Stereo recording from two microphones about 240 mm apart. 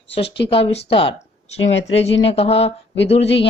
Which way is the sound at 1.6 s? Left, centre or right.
Left.